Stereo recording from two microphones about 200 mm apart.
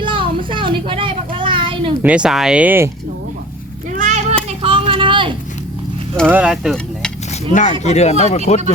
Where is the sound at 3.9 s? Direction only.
35° right (ahead or behind).